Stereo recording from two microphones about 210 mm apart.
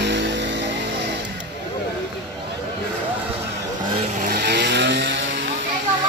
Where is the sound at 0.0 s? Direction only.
55° right (ahead or behind).